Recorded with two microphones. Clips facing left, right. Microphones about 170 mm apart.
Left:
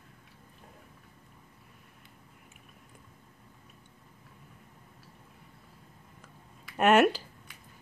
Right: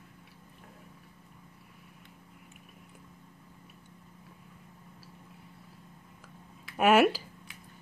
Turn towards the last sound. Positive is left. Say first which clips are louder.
# even
turn(degrees=-5)  # may be behind; listen again after turning